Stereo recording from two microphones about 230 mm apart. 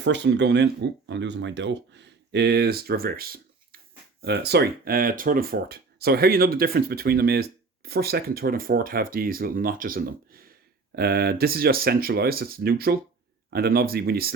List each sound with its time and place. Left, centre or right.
0.0 s speech: right